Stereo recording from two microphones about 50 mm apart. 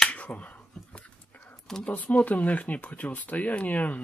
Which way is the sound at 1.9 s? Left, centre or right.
Left.